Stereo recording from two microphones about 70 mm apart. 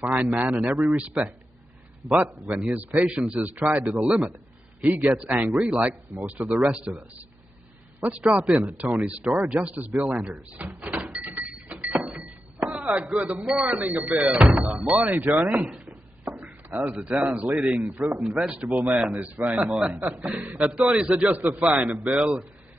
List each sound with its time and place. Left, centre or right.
0.0 s speech: centre
8.3 s speech: centre
11.1 s a sound: right
12.7 s speech: centre
21.0 s speech: centre
21.3 s speech: right